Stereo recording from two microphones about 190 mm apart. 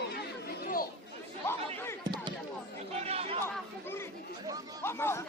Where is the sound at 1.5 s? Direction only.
15° left (ahead or behind).